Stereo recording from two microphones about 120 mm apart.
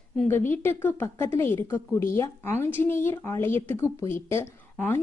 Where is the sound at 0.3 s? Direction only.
20° left (ahead or behind).